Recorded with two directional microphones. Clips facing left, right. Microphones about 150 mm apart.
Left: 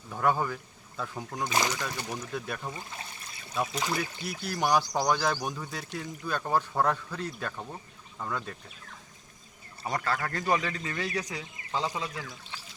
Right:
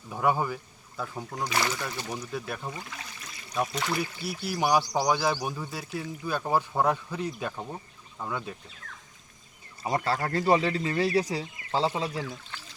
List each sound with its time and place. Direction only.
0.1 s speech: 10° right (ahead or behind)
1.5 s speech: 15° left (ahead or behind)
2.3 s speech: 5° right (ahead or behind)
2.7 s speech: 30° left (ahead or behind)
3.5 s speech: 5° left (ahead or behind)
4.2 s speech: 10° right (ahead or behind)
9.8 s speech: 25° right (ahead or behind)